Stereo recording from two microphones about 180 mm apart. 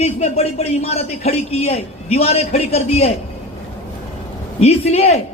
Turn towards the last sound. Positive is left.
turn(degrees=35)  # may be behind; listen again after turning